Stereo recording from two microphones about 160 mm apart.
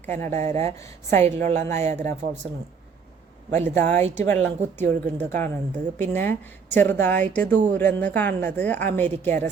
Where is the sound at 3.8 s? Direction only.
45° right (ahead or behind).